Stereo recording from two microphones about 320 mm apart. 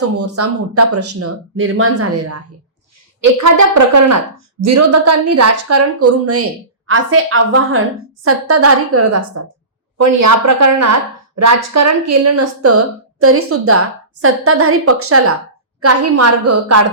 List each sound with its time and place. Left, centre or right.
0.2 s a woman's voice: right
3.4 s a woman's voice: right
10.0 s a woman's voice: right